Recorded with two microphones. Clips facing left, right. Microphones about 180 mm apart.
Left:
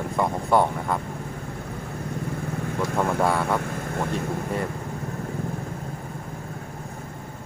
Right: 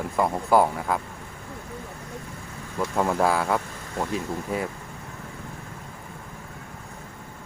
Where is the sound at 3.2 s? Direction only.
Centre (ahead or behind).